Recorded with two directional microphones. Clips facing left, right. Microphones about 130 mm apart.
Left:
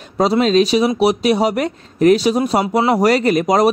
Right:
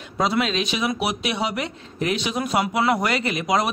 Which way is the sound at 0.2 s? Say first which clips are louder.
Left 9 dB; 40° left (ahead or behind).